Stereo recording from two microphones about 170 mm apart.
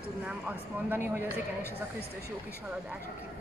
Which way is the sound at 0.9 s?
15° right (ahead or behind).